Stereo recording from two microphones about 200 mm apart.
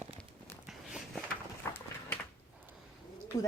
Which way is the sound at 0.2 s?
10° left (ahead or behind).